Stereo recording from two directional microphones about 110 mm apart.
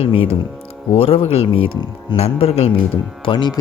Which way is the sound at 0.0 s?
55° left (ahead or behind).